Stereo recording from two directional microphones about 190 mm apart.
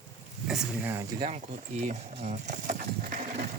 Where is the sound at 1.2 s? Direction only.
35° right (ahead or behind).